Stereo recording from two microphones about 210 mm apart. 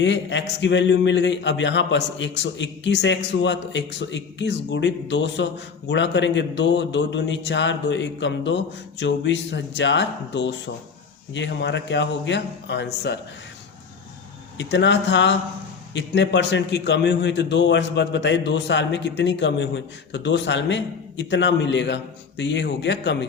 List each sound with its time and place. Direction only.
0.0 s a man's voice: 60° left (ahead or behind)
14.6 s a man's voice: 60° left (ahead or behind)